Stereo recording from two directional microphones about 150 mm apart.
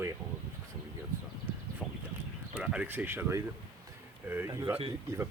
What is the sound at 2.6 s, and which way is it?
Speech, 10° right (ahead or behind).